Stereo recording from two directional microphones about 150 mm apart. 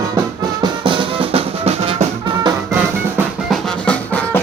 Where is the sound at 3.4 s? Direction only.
10° left (ahead or behind).